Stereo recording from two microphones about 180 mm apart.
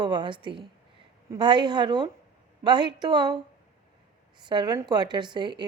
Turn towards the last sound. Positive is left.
turn(degrees=-25)  # may be behind; listen again after turning